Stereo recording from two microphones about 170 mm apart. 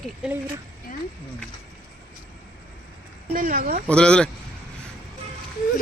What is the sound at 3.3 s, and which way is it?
Speech, 55° right (ahead or behind).